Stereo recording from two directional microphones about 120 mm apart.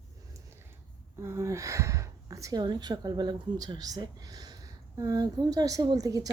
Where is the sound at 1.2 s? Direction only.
25° right (ahead or behind).